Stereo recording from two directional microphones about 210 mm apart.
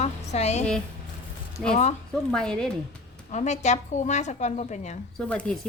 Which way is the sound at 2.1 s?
5° left (ahead or behind).